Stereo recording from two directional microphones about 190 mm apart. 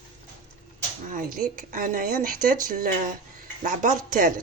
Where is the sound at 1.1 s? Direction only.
45° right (ahead or behind).